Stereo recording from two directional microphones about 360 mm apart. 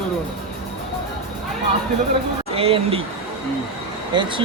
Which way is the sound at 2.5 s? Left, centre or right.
Centre.